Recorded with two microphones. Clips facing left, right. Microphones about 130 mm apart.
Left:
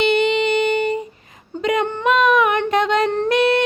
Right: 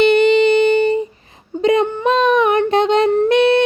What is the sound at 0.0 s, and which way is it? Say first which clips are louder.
Music: right 6 dB; 40° right (ahead or behind).